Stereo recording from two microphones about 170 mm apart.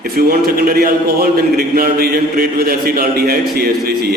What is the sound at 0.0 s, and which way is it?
A man's voice, 65° right (ahead or behind).